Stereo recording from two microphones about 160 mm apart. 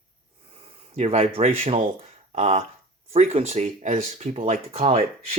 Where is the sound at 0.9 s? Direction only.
40° right (ahead or behind).